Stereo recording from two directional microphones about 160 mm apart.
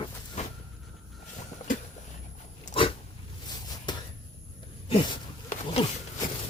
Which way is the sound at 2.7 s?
35° left (ahead or behind).